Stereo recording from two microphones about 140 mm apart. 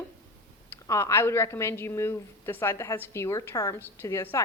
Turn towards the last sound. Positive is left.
turn(degrees=20)  # may be behind; listen again after turning